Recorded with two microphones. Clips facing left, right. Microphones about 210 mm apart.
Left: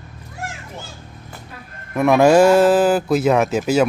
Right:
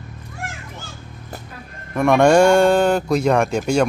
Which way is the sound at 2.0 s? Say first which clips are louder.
Left 1 dB; 5° left (ahead or behind).